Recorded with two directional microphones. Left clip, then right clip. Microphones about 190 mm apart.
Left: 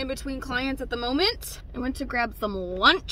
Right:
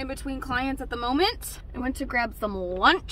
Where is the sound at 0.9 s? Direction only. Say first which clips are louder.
Right 1 dB; 20° left (ahead or behind).